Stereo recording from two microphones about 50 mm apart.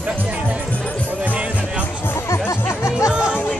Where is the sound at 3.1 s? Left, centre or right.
Right.